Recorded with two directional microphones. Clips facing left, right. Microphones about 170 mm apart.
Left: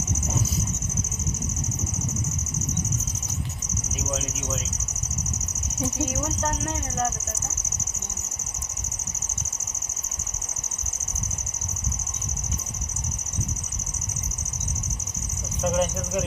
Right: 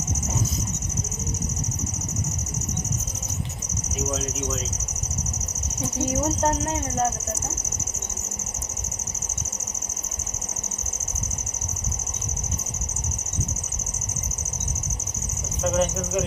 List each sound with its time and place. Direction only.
6.2 s speech: 30° right (ahead or behind)
15.6 s speech: centre (ahead or behind)